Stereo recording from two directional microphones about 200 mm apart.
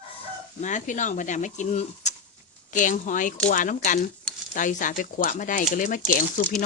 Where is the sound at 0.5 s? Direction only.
40° left (ahead or behind).